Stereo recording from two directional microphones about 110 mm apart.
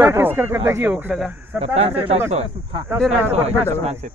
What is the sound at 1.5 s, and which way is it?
Speech, 65° right (ahead or behind).